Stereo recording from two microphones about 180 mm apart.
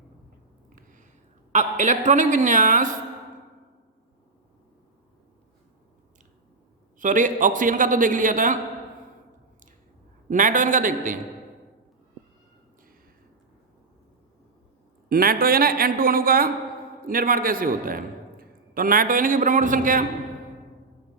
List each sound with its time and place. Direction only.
0.8 s a sound: 45° right (ahead or behind)
1.5 s a man's voice: 40° right (ahead or behind)
7.0 s a man's voice: 45° right (ahead or behind)
10.2 s a man's voice: 45° right (ahead or behind)
15.1 s a man's voice: 55° right (ahead or behind)